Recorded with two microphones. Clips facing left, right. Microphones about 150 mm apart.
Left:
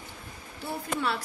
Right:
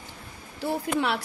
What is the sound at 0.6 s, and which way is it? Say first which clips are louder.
Speech: right 5 dB; 75° right (ahead or behind).